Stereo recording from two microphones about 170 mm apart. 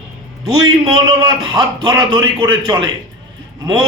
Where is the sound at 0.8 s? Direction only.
25° right (ahead or behind).